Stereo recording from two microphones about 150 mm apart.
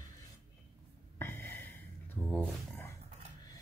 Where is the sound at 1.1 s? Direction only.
15° left (ahead or behind).